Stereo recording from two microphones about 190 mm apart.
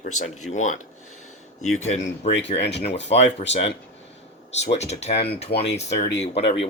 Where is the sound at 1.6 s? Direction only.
90° left.